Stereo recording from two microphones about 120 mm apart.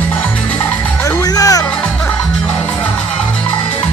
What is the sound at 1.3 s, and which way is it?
Music, 30° left (ahead or behind).